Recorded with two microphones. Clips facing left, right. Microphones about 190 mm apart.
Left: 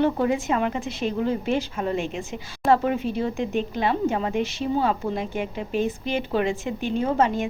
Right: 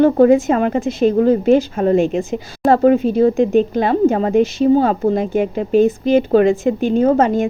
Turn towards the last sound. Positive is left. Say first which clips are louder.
# right 9 dB
turn(degrees=-45)  # may be behind; listen again after turning